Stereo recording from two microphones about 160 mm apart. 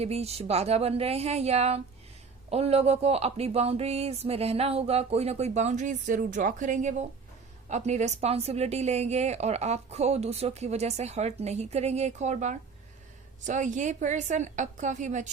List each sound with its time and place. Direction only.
0.0 s speech: 40° right (ahead or behind)